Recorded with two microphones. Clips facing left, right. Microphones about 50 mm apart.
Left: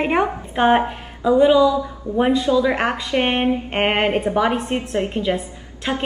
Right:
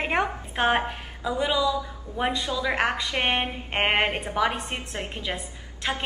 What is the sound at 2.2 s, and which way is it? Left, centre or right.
A woman's voice, centre.